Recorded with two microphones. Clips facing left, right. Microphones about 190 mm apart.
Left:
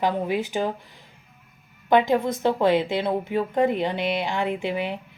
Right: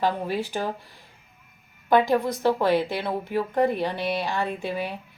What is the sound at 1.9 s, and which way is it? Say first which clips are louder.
A woman's voice: left 1 dB; 20° left (ahead or behind).